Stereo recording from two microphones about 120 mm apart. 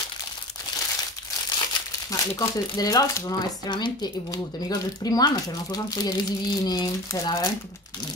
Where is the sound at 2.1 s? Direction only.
30° left (ahead or behind).